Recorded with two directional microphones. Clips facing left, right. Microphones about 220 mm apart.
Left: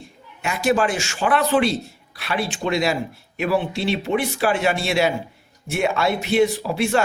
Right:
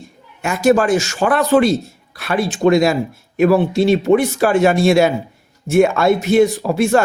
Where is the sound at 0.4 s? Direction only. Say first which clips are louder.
Right 6 dB; 45° right (ahead or behind).